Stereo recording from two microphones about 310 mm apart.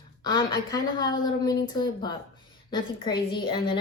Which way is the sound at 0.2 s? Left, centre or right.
Centre.